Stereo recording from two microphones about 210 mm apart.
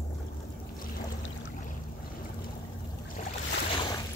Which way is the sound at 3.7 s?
20° left (ahead or behind).